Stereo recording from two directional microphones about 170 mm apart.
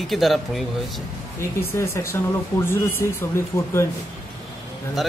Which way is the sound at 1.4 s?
15° left (ahead or behind).